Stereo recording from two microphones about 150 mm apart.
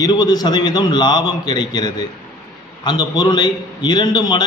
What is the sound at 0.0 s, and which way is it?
A man's voice, 25° left (ahead or behind).